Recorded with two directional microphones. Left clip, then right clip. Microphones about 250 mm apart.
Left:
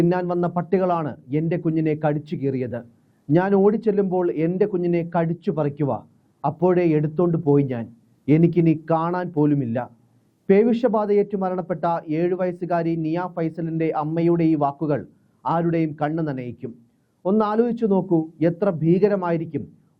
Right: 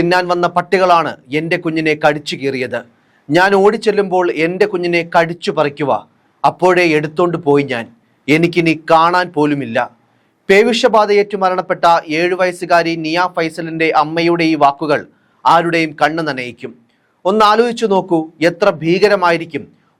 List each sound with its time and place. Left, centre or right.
0.0 s speech: centre
18.0 s speech: right
18.3 s speech: centre